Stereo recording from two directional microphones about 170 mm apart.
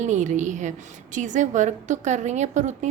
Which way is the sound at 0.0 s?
45° right (ahead or behind).